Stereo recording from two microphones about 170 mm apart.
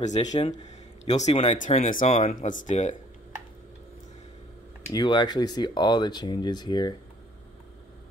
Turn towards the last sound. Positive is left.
turn(degrees=25)  # may be behind; listen again after turning